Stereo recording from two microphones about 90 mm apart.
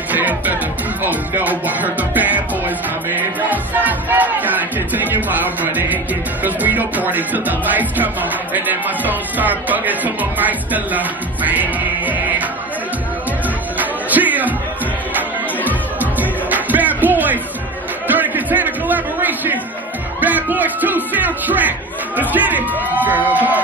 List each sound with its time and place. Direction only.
0.1 s music: 20° right (ahead or behind)
13.7 s music: 20° right (ahead or behind)
18.0 s a sound: 20° right (ahead or behind)
20.2 s music: 20° right (ahead or behind)